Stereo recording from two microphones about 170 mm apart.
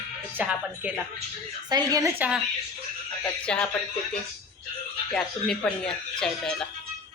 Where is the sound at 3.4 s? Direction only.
5° left (ahead or behind).